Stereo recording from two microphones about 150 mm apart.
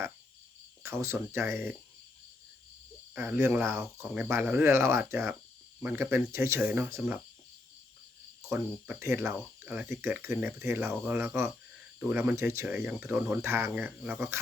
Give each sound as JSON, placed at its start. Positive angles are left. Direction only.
{"t": 0.8, "sound": "speech", "side_deg": -20}
{"t": 3.2, "sound": "speech", "side_deg": -15}
{"t": 8.4, "sound": "speech", "side_deg": -10}